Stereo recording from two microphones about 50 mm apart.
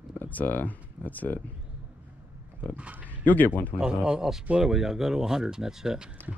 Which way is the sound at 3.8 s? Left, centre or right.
Centre.